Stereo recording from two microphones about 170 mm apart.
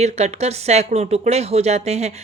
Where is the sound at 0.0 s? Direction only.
40° right (ahead or behind).